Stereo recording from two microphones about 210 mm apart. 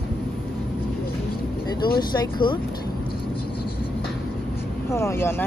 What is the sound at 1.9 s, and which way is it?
Speech, 20° left (ahead or behind).